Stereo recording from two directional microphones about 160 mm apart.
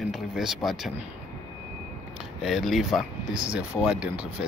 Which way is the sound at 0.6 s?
20° left (ahead or behind).